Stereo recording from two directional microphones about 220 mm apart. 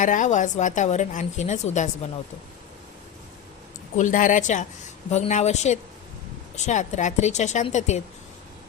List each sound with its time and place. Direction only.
0.0 s a woman's voice: 35° left (ahead or behind)
3.9 s a woman's voice: 35° left (ahead or behind)